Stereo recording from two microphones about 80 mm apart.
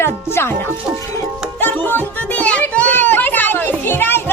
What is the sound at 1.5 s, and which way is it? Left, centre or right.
Music, left.